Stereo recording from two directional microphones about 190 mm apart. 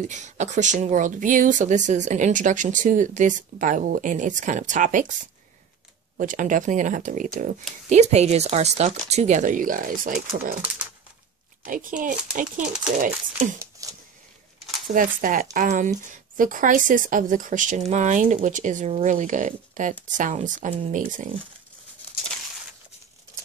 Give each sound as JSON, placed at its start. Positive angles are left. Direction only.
{"t": 0.0, "sound": "speech", "side_deg": -40}
{"t": 6.1, "sound": "speech", "side_deg": -40}
{"t": 11.6, "sound": "a child's voice", "side_deg": -45}
{"t": 13.8, "sound": "a sound", "side_deg": -15}
{"t": 15.0, "sound": "speech", "side_deg": -45}